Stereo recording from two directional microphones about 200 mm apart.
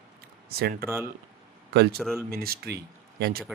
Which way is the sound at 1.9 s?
Centre (ahead or behind).